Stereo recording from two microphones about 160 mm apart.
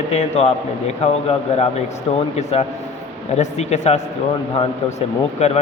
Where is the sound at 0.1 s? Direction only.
45° left (ahead or behind).